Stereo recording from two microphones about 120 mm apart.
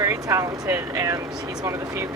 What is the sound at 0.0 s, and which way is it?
Speech, 25° right (ahead or behind).